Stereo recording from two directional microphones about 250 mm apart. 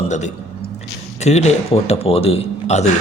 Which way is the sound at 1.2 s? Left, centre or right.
Left.